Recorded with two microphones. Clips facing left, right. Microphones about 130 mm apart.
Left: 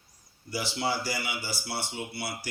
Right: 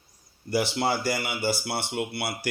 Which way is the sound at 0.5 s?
60° right (ahead or behind).